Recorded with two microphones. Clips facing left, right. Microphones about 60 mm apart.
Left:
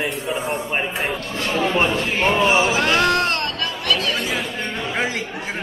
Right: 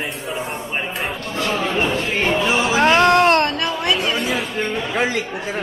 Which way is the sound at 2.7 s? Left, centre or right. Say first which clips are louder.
Right 4 dB; right.